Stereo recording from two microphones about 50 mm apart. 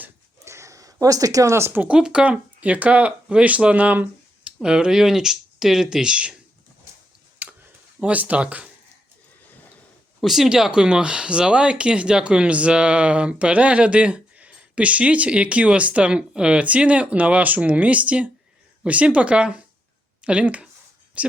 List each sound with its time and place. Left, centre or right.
0.4 s a sound: right
1.9 s speech: centre
2.2 s speech: right
4.4 s speech: centre
7.3 s tick-tock: right
8.0 s speech: right
10.2 s speech: centre
10.5 s speech: centre